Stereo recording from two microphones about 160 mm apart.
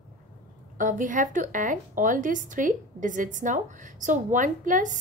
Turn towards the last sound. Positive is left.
turn(degrees=-55)  # may be behind; listen again after turning